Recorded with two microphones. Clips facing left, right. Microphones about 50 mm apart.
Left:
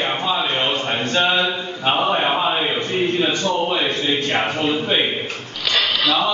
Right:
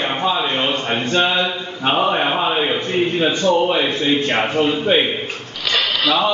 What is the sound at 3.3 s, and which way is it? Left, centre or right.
A man's voice, right.